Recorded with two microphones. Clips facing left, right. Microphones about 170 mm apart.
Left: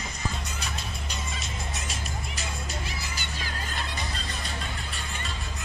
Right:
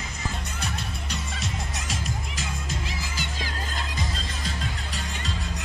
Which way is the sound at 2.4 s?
90° right.